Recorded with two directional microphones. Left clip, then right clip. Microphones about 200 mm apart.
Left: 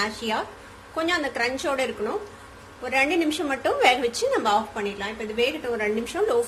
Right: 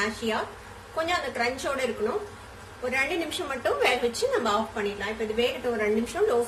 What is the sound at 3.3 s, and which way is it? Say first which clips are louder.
A woman's voice: left 3 dB; 30° left (ahead or behind).